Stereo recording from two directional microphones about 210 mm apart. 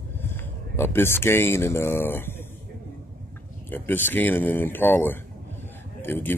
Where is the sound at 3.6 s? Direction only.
10° left (ahead or behind).